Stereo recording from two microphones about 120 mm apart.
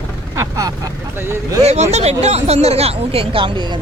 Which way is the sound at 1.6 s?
65° right (ahead or behind).